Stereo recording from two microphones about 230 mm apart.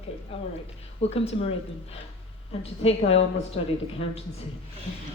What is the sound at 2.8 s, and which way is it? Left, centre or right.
Speech, left.